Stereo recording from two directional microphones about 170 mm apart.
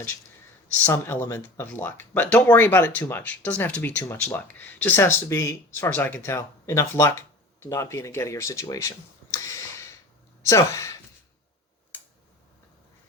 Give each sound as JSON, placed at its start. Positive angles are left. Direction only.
{"t": 0.9, "sound": "speech", "side_deg": 15}
{"t": 9.3, "sound": "a sound", "side_deg": 15}
{"t": 10.4, "sound": "speech", "side_deg": 20}